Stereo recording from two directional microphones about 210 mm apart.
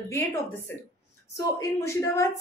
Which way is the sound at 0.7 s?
10° left (ahead or behind).